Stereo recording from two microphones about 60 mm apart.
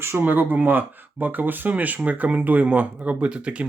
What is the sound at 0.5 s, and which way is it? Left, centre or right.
Speech, right.